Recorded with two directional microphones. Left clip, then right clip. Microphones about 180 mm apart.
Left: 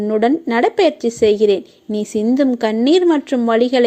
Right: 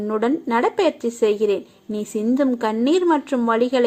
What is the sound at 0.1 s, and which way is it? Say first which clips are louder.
A woman's voice: left 4 dB; 30° left (ahead or behind).